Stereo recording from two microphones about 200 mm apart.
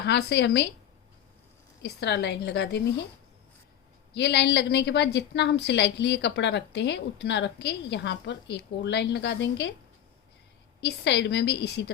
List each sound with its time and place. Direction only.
0.0 s a woman's voice: 55° left (ahead or behind)
1.8 s a woman's voice: 60° left (ahead or behind)
4.1 s a woman's voice: 55° left (ahead or behind)
10.8 s a woman's voice: 60° left (ahead or behind)